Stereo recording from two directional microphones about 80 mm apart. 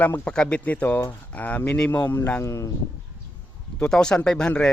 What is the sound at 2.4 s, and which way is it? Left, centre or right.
Speech, left.